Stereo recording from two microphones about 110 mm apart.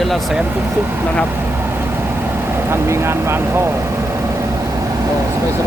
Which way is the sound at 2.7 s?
25° right (ahead or behind).